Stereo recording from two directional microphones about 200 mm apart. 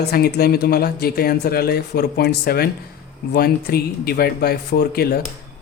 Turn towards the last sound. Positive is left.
turn(degrees=50)  # may be behind; listen again after turning